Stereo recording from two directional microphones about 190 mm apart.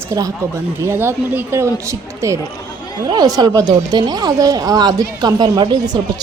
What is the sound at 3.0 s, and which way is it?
Speech, 20° right (ahead or behind).